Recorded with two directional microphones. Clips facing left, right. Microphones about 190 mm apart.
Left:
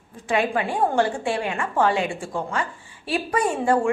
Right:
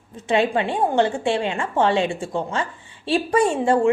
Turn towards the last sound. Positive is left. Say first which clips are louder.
# right 3 dB
turn(degrees=-25)  # may be behind; listen again after turning